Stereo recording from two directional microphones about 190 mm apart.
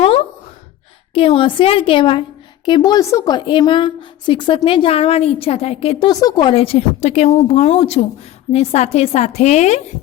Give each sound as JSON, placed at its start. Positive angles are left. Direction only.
{"t": 1.1, "sound": "a woman's voice", "side_deg": 30}